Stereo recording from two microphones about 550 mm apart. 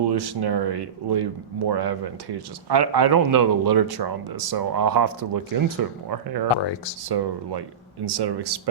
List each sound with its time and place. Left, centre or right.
0.0 s speech: right